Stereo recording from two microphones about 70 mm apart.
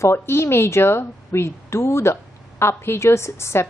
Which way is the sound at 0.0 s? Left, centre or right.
Left.